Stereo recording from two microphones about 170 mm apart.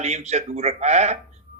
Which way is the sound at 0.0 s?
40° right (ahead or behind).